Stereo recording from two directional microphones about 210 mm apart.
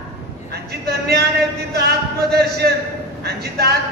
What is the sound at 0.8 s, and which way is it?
A man's voice, 50° right (ahead or behind).